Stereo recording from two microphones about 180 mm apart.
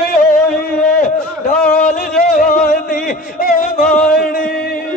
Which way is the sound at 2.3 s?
50° left (ahead or behind).